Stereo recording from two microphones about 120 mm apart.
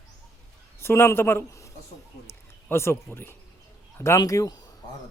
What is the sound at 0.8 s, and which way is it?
A man's voice, 20° left (ahead or behind).